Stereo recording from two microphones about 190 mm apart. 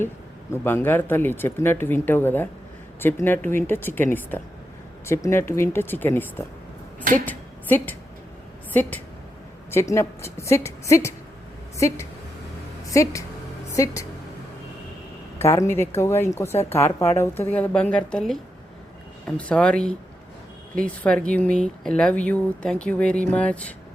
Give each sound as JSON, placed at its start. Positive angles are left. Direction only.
{"t": 0.5, "sound": "a woman's voice", "side_deg": 10}
{"t": 15.4, "sound": "speech", "side_deg": 15}
{"t": 19.4, "sound": "speech", "side_deg": 5}